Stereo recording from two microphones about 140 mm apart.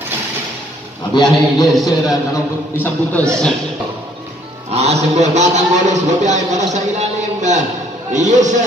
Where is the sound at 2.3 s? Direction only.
15° left (ahead or behind).